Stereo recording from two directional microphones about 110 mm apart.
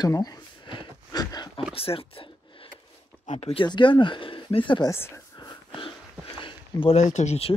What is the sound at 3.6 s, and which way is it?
Speech, 45° left (ahead or behind).